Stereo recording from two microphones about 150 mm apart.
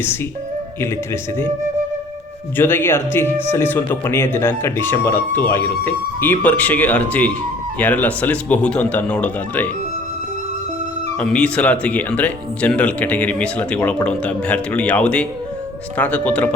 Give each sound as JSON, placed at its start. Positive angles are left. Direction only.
{"t": 0.8, "sound": "speech", "side_deg": 15}
{"t": 2.6, "sound": "speech", "side_deg": 15}
{"t": 11.2, "sound": "speech", "side_deg": 5}